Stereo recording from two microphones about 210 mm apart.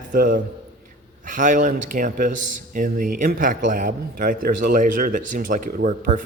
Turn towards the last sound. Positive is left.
turn(degrees=-40)  # may be behind; listen again after turning